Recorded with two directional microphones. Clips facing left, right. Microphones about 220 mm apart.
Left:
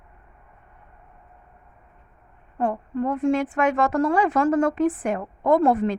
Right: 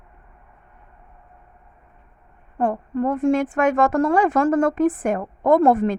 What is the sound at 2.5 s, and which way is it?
A woman's voice, 50° right (ahead or behind).